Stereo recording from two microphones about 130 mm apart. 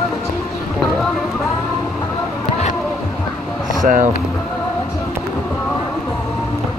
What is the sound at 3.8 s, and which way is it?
Speech, 90° right.